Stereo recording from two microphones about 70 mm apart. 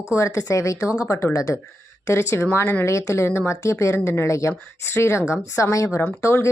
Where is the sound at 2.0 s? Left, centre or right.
Left.